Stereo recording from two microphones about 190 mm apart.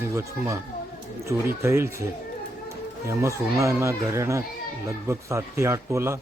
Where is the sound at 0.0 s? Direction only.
15° right (ahead or behind).